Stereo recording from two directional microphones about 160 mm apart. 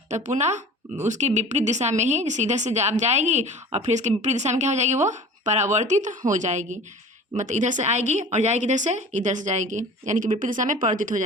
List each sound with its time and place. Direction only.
0.1 s a woman's voice: 45° right (ahead or behind)